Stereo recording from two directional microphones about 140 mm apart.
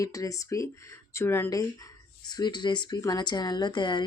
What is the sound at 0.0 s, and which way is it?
Speech, 25° left (ahead or behind).